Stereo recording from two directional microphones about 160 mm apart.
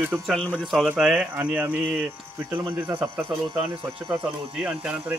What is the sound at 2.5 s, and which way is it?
Speech, 20° right (ahead or behind).